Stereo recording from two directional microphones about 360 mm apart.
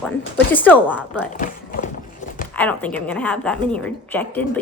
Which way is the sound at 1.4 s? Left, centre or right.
Left.